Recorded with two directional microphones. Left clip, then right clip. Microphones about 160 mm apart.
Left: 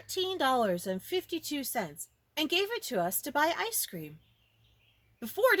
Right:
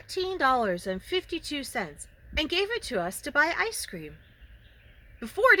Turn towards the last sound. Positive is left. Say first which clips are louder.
# right 5 dB
turn(degrees=25)  # may be behind; listen again after turning